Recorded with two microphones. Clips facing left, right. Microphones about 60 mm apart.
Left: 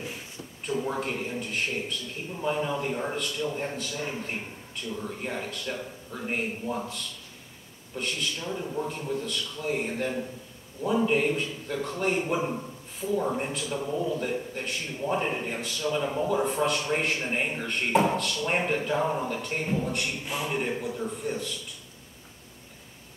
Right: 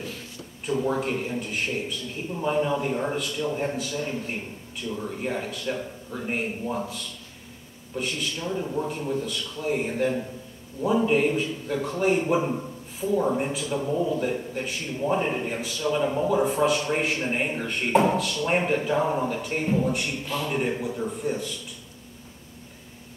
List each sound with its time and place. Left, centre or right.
0.7 s a man's voice: centre
20.2 s a man's voice: centre
20.5 s a man's voice: centre